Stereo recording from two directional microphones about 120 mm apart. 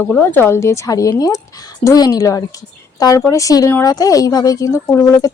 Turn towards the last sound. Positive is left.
turn(degrees=25)  # may be behind; listen again after turning